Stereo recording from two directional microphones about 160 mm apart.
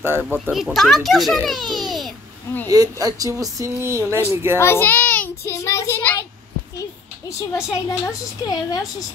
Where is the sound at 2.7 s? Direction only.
20° right (ahead or behind).